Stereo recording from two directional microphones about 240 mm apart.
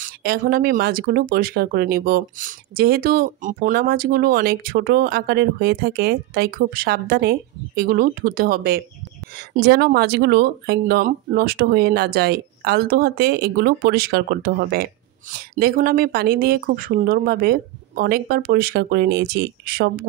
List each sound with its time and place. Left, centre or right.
0.0 s speech: right